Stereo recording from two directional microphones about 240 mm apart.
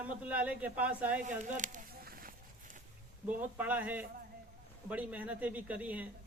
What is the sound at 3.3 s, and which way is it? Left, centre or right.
A man's voice, centre.